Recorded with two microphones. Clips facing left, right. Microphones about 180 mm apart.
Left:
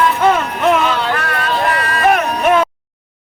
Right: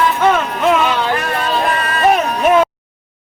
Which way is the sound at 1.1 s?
25° right (ahead or behind).